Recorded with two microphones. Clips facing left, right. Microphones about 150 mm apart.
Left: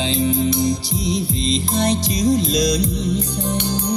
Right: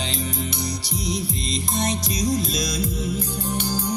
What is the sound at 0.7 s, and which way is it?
Music, 25° left (ahead or behind).